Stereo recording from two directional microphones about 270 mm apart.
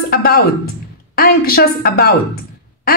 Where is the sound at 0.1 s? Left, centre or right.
Left.